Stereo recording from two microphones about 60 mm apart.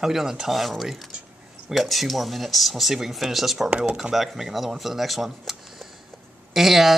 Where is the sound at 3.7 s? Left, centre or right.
Centre.